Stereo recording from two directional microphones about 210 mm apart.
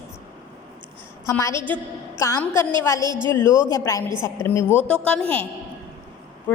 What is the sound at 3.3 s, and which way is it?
A woman's voice, 10° left (ahead or behind).